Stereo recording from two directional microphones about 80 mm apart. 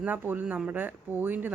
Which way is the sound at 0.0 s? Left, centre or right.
Right.